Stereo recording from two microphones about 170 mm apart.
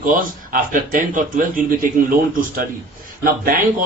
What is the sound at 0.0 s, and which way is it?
A man's voice, 50° right (ahead or behind).